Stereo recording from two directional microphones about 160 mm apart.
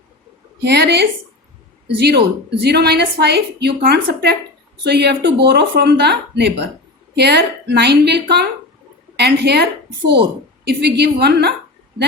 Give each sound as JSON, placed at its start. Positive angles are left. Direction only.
{"t": 0.6, "sound": "speech", "side_deg": -90}
{"t": 10.7, "sound": "speech", "side_deg": -90}